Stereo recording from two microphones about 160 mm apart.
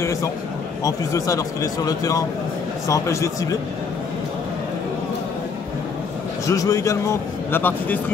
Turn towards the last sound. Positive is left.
turn(degrees=10)  # may be behind; listen again after turning